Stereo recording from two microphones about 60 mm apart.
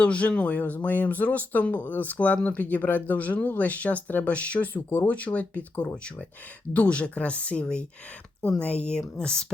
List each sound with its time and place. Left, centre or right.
0.0 s speech: left